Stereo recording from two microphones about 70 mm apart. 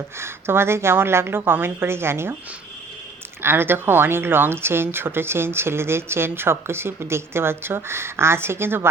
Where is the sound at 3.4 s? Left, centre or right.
Right.